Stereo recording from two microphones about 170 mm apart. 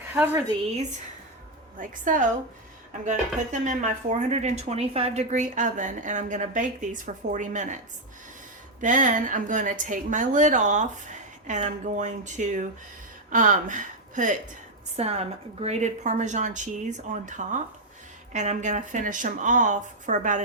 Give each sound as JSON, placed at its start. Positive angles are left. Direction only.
{"t": 1.8, "sound": "speech", "side_deg": -50}
{"t": 8.8, "sound": "speech", "side_deg": -50}
{"t": 14.9, "sound": "speech", "side_deg": -40}